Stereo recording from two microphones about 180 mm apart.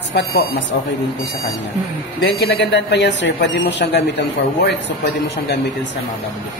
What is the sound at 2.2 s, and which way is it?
Speech, 85° left.